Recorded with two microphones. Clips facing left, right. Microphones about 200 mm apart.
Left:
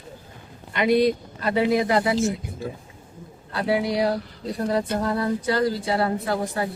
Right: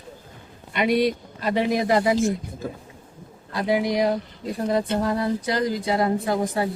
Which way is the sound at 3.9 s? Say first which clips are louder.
Right 1 dB; 15° right (ahead or behind).